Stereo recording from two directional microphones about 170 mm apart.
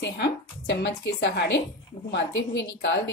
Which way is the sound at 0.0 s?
90° left.